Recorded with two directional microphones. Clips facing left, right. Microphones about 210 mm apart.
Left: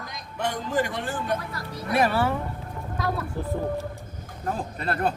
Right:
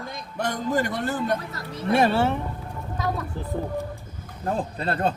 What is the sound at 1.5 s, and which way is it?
Speech, 25° right (ahead or behind).